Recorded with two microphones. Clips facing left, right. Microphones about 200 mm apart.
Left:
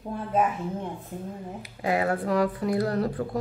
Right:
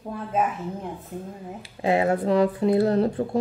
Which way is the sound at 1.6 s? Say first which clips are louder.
Right 4 dB; 25° right (ahead or behind).